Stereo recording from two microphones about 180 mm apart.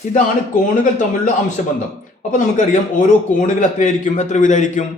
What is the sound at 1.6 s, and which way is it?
A man's voice, 45° left (ahead or behind).